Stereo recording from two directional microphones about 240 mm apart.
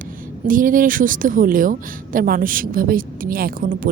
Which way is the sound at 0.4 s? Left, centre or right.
Right.